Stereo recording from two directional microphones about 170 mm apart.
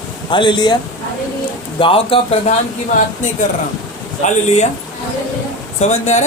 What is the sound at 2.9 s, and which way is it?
A woman's voice, 45° left (ahead or behind).